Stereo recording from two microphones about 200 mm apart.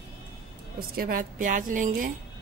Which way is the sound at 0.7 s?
50° right (ahead or behind).